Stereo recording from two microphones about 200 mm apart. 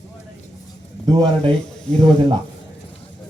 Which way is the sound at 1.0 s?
20° right (ahead or behind).